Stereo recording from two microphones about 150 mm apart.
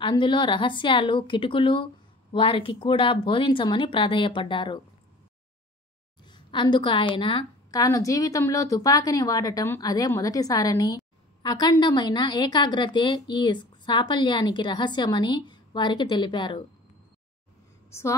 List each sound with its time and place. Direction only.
0.0 s a woman's voice: 30° left (ahead or behind)
6.2 s a woman's voice: 30° left (ahead or behind)
17.8 s a woman's voice: 20° left (ahead or behind)